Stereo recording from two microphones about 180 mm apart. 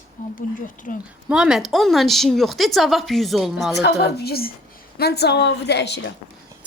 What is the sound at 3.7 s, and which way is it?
A woman's voice, 70° left (ahead or behind).